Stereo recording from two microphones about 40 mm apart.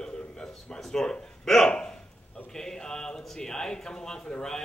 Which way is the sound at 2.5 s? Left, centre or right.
Centre.